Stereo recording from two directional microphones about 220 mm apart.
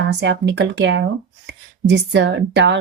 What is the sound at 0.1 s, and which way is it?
Speech, 55° right (ahead or behind).